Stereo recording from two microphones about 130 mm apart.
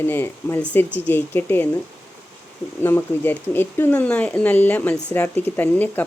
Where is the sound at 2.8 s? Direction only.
15° left (ahead or behind).